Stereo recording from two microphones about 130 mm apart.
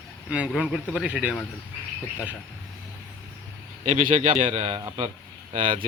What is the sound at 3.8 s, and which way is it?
Speech, 80° right.